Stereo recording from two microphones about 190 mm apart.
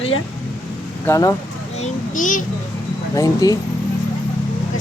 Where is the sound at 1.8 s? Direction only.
45° left (ahead or behind).